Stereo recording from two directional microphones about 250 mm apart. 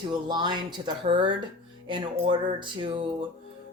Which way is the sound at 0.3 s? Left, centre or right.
Centre.